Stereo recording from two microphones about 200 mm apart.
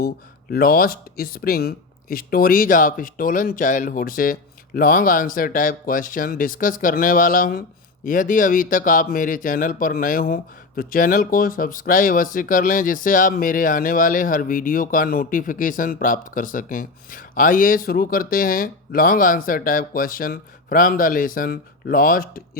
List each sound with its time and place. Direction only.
0.5 s speech: 50° left (ahead or behind)